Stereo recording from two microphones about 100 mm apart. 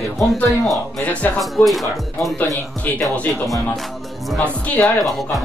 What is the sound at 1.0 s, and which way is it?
Music, 15° left (ahead or behind).